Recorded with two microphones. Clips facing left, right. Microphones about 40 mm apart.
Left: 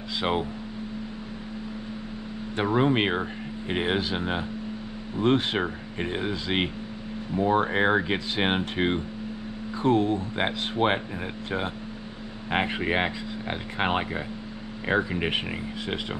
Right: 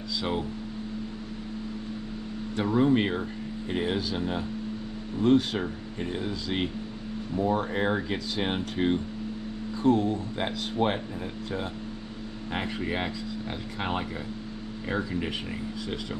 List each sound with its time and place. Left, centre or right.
0.2 s speech: left
2.5 s speech: left
12.5 s speech: left